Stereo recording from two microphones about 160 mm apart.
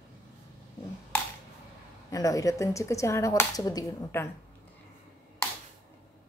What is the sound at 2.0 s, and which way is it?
Speech, 20° left (ahead or behind).